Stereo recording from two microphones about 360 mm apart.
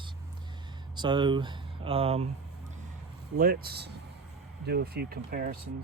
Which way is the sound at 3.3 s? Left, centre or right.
Right.